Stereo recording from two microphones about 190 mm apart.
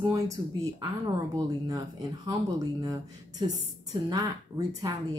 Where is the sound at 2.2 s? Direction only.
20° right (ahead or behind).